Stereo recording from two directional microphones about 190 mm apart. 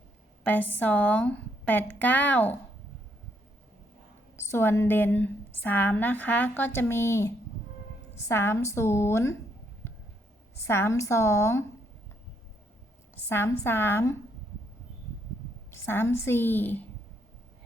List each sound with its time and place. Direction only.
0.4 s a woman's voice: 10° left (ahead or behind)
4.4 s a woman's voice: 15° left (ahead or behind)
10.7 s a woman's voice: 15° left (ahead or behind)
13.2 s a woman's voice: 10° left (ahead or behind)
15.7 s a woman's voice: 10° left (ahead or behind)